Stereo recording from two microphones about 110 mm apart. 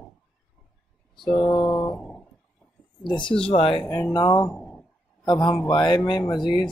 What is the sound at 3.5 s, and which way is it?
Speech, 55° left (ahead or behind).